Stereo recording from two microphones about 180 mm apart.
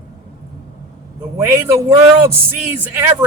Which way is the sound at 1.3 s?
15° right (ahead or behind).